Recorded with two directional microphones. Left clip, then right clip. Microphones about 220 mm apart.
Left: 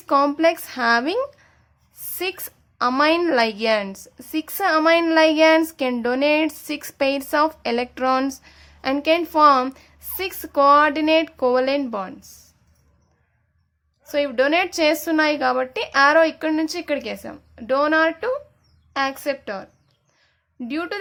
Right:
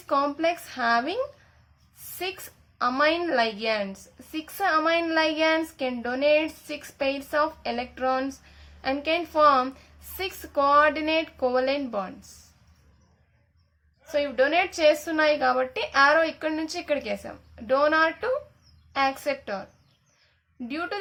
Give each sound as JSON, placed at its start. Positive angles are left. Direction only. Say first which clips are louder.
{"t": 0.1, "sound": "a woman's voice", "louder": "left 7 dB", "side_deg": 30}
{"t": 14.1, "sound": "a woman's voice", "louder": "left 4 dB", "side_deg": 30}
{"t": 20.7, "sound": "a woman's voice", "louder": "left 4 dB", "side_deg": 30}